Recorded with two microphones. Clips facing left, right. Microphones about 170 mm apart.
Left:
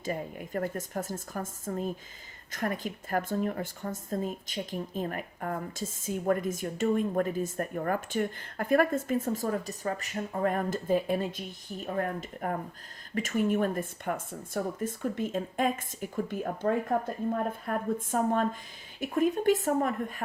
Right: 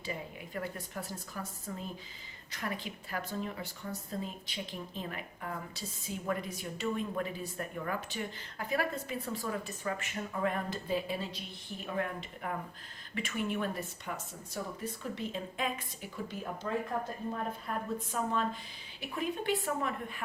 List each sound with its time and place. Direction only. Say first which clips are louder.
0.0 s a woman's voice: left 6 dB; 50° left (ahead or behind)